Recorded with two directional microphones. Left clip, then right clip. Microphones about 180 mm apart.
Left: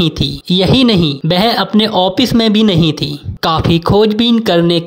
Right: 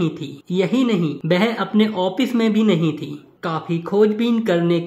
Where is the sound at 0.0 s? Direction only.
40° left (ahead or behind).